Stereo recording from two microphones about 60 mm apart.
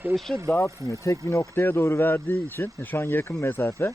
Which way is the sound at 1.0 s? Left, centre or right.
Left.